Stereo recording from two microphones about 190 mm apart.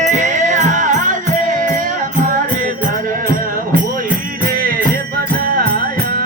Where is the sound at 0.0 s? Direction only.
40° right (ahead or behind).